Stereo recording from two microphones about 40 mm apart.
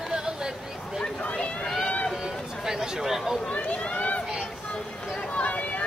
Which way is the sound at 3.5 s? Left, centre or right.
Left.